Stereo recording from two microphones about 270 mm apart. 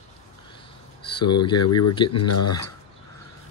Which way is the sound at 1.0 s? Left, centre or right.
Centre.